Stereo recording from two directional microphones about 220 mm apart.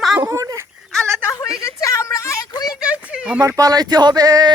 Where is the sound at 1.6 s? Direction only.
15° left (ahead or behind).